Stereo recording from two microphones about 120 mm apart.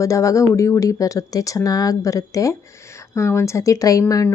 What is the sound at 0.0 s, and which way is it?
Speech, 25° left (ahead or behind).